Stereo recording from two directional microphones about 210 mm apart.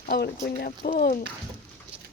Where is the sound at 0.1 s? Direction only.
45° left (ahead or behind).